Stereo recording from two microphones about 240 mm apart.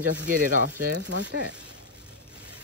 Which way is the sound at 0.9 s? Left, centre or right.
Right.